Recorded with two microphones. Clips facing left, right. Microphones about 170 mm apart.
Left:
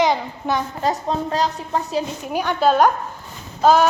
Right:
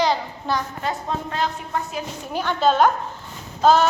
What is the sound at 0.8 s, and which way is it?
A woman's voice, 35° left (ahead or behind).